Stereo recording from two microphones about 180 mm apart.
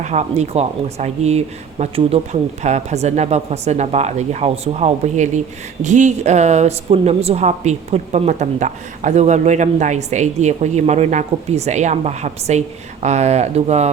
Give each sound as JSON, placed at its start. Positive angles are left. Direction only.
{"t": 0.0, "sound": "a woman's voice", "side_deg": -40}